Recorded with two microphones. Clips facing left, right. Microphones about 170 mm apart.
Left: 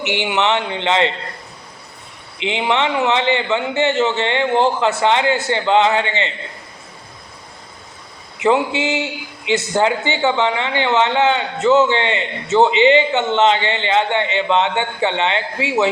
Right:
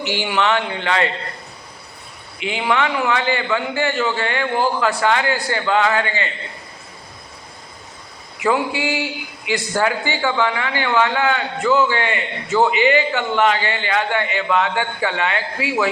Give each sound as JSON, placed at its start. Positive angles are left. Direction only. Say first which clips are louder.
{"t": 0.0, "sound": "a man's voice", "louder": "left 1 dB", "side_deg": 20}
{"t": 2.4, "sound": "a man's voice", "louder": "left 2 dB", "side_deg": 20}
{"t": 8.4, "sound": "a man's voice", "louder": "left 3 dB", "side_deg": 25}